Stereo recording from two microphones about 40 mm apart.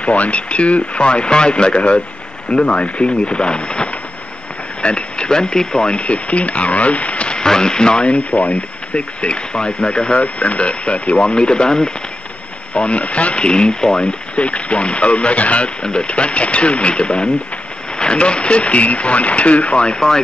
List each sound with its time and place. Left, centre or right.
0.0 s speech: left
7.4 s speech: centre; by 15.7 s left
15.8 s speech: left